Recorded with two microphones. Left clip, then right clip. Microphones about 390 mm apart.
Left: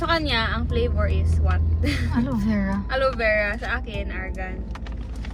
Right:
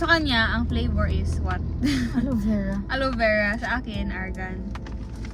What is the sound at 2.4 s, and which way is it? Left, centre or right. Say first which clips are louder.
Speech: left 2 dB; left.